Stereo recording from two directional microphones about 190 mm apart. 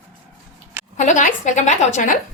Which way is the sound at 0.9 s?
40° left (ahead or behind).